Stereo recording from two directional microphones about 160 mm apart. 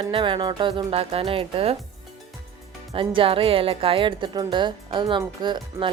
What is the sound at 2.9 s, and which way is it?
Speech, 35° right (ahead or behind).